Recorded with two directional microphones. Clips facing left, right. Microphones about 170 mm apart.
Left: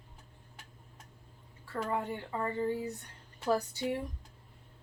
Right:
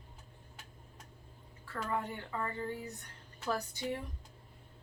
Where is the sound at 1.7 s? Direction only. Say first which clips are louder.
Left 3 dB; 25° left (ahead or behind).